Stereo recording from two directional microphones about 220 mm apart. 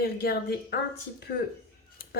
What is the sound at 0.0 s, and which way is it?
Speech, 45° left (ahead or behind).